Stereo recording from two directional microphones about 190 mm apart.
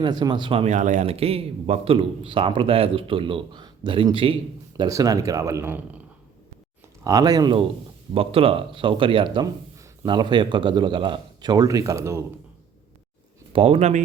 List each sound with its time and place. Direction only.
0.0 s a man's voice: 20° right (ahead or behind)
7.0 s a man's voice: 20° right (ahead or behind)
13.5 s speech: 30° right (ahead or behind)